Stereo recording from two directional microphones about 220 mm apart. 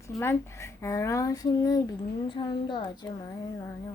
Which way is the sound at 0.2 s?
10° left (ahead or behind).